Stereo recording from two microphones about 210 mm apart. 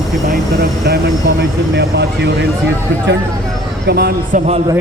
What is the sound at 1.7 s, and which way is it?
Speech, 55° right (ahead or behind).